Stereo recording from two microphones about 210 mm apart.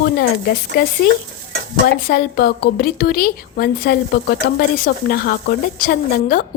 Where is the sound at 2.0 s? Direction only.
45° left (ahead or behind).